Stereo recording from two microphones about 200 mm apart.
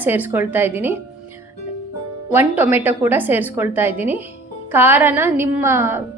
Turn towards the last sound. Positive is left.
turn(degrees=-10)  # may be behind; listen again after turning